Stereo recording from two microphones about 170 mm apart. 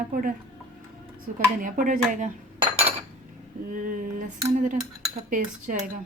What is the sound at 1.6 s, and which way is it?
Cutlery, 50° right (ahead or behind).